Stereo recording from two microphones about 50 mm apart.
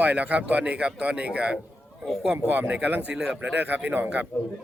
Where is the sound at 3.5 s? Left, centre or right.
Right.